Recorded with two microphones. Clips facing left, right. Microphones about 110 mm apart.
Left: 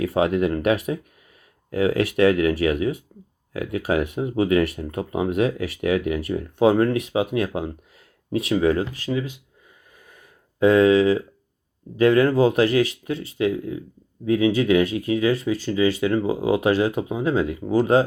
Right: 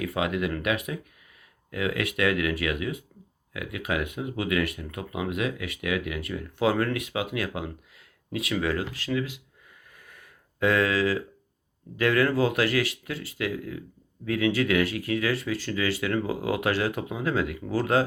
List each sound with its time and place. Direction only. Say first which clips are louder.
0.0 s speech: left 7 dB; 30° left (ahead or behind)
10.1 s a sound: left 2 dB; 25° left (ahead or behind)
11.9 s speech: left 6 dB; 25° left (ahead or behind)